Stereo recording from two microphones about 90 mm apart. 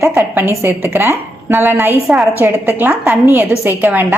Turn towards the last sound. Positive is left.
turn(degrees=-20)  # may be behind; listen again after turning